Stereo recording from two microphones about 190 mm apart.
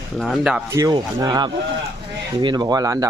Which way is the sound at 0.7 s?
15° right (ahead or behind).